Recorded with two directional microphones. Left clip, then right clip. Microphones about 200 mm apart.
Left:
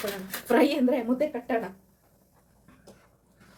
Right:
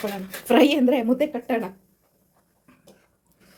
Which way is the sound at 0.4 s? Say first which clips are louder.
Right 5 dB; 35° right (ahead or behind).